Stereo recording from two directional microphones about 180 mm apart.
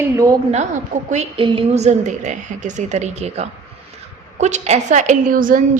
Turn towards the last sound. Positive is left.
turn(degrees=-50)  # may be behind; listen again after turning